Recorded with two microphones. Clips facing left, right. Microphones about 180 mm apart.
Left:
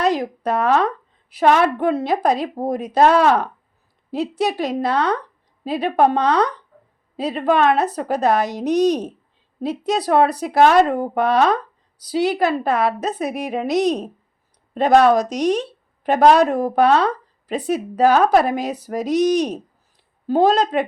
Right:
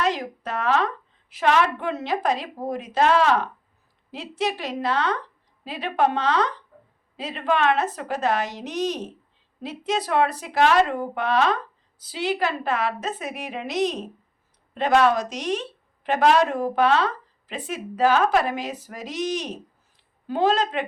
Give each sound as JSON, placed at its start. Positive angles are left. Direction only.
{"t": 0.0, "sound": "a woman's voice", "side_deg": 40}